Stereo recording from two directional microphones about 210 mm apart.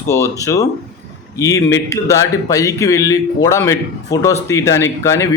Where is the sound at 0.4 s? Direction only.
15° left (ahead or behind).